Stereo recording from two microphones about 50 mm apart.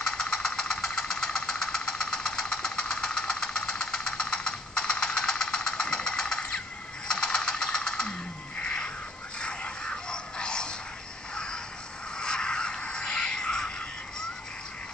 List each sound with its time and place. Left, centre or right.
0.0 s engine knocking: centre
7.1 s a sound: centre
9.4 s music: left
11.3 s crow: centre
12.2 s music: centre